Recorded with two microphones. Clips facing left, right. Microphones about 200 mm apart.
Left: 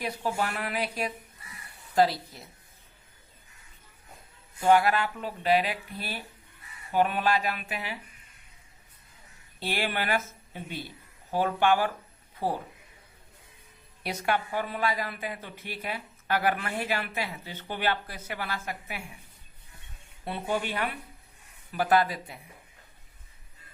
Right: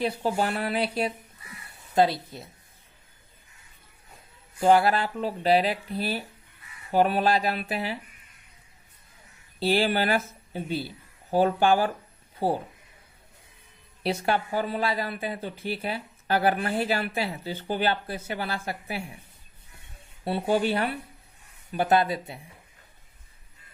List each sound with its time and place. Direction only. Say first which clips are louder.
0.0 s speech: right 4 dB; 25° right (ahead or behind)
4.6 s speech: right 2 dB; 30° right (ahead or behind)
9.6 s speech: right 7 dB; 30° right (ahead or behind)
14.0 s speech: right 3 dB; 30° right (ahead or behind)
20.2 s speech: right 6 dB; 30° right (ahead or behind)